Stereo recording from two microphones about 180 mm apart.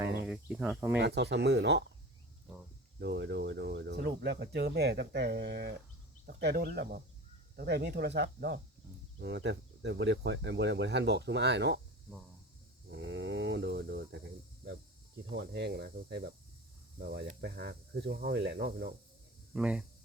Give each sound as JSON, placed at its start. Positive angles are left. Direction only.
{"t": 0.3, "sound": "speech", "side_deg": -5}
{"t": 0.9, "sound": "speech", "side_deg": -70}
{"t": 3.0, "sound": "speech", "side_deg": -75}
{"t": 12.9, "sound": "speech", "side_deg": -80}
{"t": 19.5, "sound": "speech", "side_deg": -5}